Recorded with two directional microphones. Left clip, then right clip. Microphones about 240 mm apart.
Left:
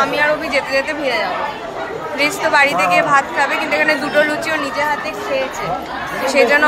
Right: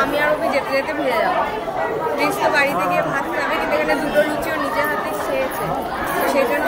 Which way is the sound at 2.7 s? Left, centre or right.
Left.